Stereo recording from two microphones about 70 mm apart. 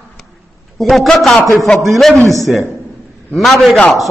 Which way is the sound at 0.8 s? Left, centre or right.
Centre.